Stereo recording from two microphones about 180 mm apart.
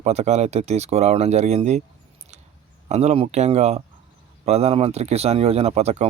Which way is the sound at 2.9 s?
35° right (ahead or behind).